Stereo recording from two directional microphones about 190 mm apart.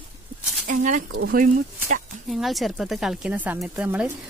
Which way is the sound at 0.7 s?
40° right (ahead or behind).